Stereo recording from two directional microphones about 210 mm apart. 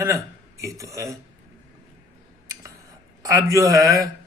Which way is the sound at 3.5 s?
15° right (ahead or behind).